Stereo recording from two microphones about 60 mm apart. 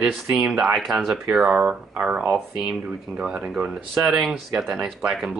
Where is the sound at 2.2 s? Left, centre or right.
Centre.